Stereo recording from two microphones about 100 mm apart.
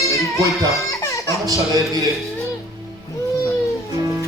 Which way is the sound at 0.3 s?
30° right (ahead or behind).